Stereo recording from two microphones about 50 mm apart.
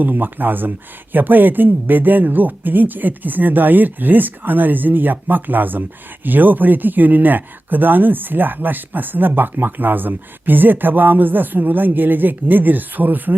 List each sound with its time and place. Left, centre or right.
0.0 s speech: right